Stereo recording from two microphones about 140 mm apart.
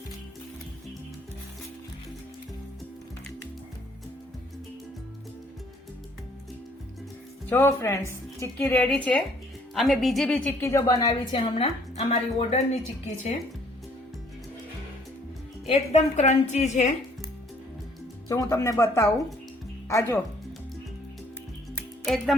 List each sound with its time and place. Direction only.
7.5 s speech: 15° left (ahead or behind); by 10.3 s centre (ahead or behind)
10.3 s a woman's voice: 15° left (ahead or behind); by 13.3 s 55° left (ahead or behind)
15.6 s speech: 45° left (ahead or behind)
18.3 s a woman's voice: 20° left (ahead or behind)
22.0 s speech: centre (ahead or behind)